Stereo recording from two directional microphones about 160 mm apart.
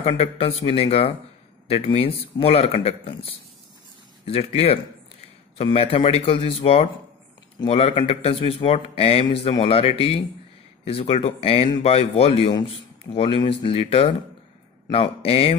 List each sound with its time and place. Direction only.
0.0 s speech: 40° left (ahead or behind)